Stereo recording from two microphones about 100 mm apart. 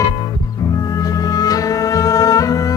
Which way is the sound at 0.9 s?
35° left (ahead or behind).